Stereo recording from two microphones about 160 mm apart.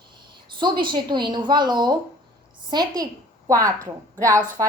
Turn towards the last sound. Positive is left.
turn(degrees=-20)  # may be behind; listen again after turning